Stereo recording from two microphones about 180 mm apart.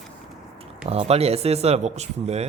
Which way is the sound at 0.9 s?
35° right (ahead or behind).